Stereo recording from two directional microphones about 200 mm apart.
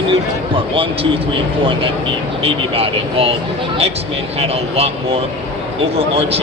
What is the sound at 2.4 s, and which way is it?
Speech, 30° right (ahead or behind).